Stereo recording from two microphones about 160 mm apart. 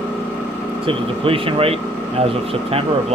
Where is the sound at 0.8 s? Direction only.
35° right (ahead or behind).